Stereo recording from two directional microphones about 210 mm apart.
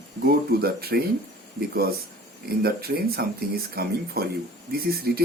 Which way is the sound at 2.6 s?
45° right (ahead or behind).